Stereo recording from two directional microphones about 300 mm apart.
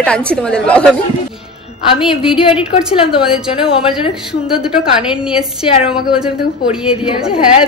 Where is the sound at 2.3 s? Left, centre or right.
Centre.